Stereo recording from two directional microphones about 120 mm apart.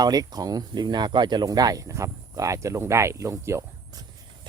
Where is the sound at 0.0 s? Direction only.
30° right (ahead or behind).